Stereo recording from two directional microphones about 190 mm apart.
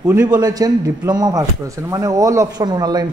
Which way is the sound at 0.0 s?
15° right (ahead or behind).